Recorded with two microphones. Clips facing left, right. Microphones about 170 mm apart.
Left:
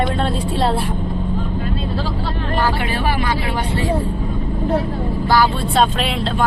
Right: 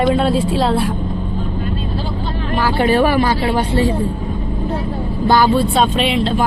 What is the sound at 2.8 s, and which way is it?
Vehicle, 40° right (ahead or behind).